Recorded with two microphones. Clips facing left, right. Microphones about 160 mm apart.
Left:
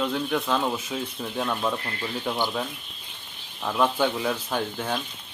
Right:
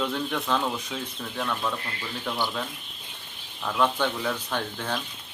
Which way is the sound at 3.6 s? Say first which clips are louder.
Left 2 dB; 10° left (ahead or behind).